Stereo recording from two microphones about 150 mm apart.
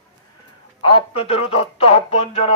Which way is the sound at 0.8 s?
35° left (ahead or behind).